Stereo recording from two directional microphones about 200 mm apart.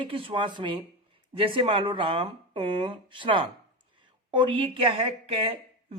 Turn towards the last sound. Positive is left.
turn(degrees=-30)  # may be behind; listen again after turning